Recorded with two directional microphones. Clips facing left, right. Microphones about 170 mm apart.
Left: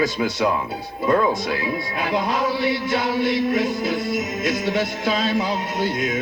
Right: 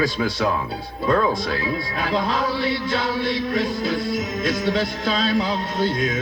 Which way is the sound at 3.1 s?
25° left (ahead or behind).